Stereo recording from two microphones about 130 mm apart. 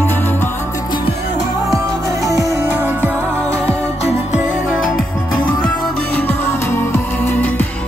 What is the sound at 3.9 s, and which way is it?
Music, 55° left (ahead or behind).